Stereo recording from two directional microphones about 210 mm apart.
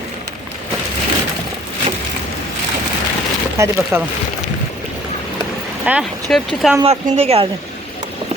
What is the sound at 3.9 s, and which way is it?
Speech, 10° right (ahead or behind).